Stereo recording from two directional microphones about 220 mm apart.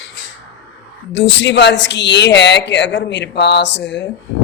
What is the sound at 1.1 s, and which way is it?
A man's voice, 55° left (ahead or behind).